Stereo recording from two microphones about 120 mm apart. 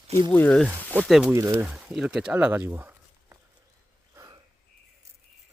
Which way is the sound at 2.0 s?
5° right (ahead or behind).